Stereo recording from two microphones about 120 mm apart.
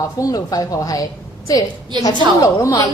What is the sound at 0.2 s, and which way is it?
A woman's voice, 30° left (ahead or behind).